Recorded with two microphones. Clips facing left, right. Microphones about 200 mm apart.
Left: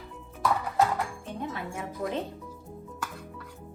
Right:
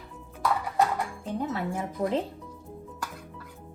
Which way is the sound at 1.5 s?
30° right (ahead or behind).